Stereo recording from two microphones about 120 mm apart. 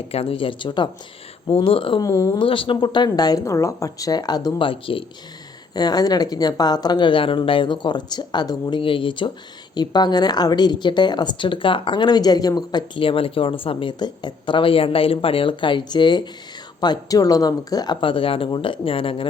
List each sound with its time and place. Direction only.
0.1 s speech: 55° left (ahead or behind)
2.0 s speech: 25° left (ahead or behind)
2.4 s a woman's voice: 45° left (ahead or behind)
4.6 s speech: 45° left (ahead or behind)
5.7 s a woman's voice: 35° left (ahead or behind)
8.8 s a woman's voice: 45° left (ahead or behind)
18.0 s speech: 50° left (ahead or behind)